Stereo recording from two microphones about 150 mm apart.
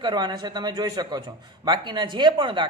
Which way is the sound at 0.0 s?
30° right (ahead or behind).